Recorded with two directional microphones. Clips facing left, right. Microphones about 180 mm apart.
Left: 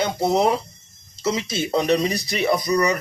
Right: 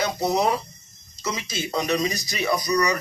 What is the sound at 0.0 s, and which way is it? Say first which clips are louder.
Speech: left 3 dB; 25° left (ahead or behind).